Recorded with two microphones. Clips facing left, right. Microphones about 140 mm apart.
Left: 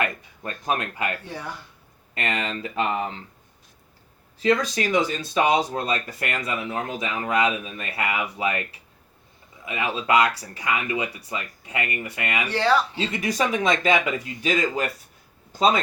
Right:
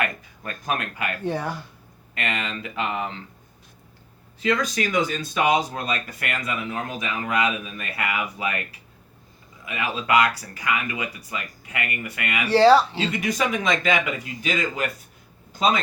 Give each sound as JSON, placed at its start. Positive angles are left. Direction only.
{"t": 0.0, "sound": "speech", "side_deg": 30}
{"t": 1.2, "sound": "speech", "side_deg": -50}
{"t": 2.1, "sound": "speech", "side_deg": 35}
{"t": 4.4, "sound": "speech", "side_deg": 30}
{"t": 9.6, "sound": "speech", "side_deg": 25}
{"t": 12.5, "sound": "speech", "side_deg": -35}
{"t": 13.0, "sound": "speech", "side_deg": 30}